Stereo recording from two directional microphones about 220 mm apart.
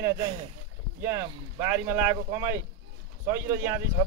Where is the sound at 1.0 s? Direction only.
10° right (ahead or behind).